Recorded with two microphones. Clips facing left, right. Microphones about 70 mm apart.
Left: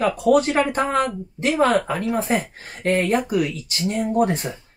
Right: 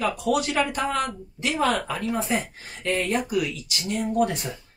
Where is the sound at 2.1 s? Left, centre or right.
Left.